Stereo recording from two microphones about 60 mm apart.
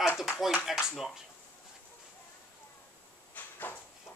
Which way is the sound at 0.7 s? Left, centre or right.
Centre.